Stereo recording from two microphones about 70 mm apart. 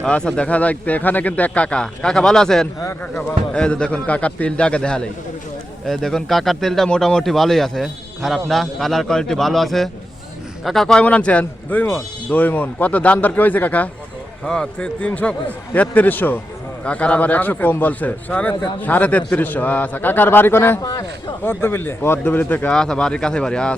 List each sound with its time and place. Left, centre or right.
0.0 s a man's voice: centre
11.0 s speech: centre
14.4 s a man's voice: centre; by 22.7 s left
22.7 s speech: centre